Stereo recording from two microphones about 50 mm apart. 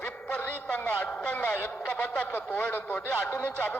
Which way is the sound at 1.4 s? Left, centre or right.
Left.